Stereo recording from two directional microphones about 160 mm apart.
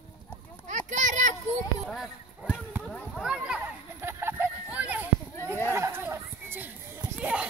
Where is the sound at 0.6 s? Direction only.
50° right (ahead or behind).